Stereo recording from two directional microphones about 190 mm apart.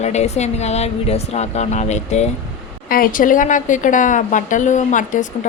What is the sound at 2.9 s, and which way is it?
A woman's voice, 45° left (ahead or behind).